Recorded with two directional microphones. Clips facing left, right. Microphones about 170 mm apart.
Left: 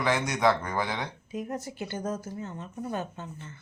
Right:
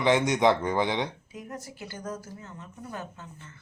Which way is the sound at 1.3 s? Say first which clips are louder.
Left 6 dB; 25° left (ahead or behind).